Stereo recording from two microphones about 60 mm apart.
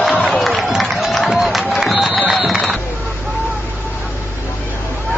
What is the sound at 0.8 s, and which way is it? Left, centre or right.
Music, centre.